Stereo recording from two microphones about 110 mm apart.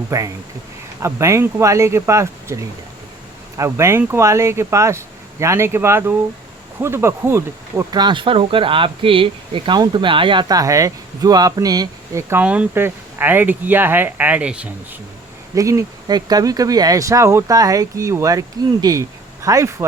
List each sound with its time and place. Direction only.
0.1 s speech: 30° right (ahead or behind)
7.9 s speech: 40° right (ahead or behind)
9.7 s speech: 40° right (ahead or behind)
10.5 s speech: 30° right (ahead or behind)
12.3 s speech: 15° right (ahead or behind)
15.5 s speech: 30° right (ahead or behind)